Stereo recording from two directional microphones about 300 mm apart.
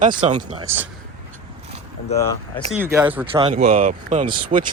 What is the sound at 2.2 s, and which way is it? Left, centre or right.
Speech, centre.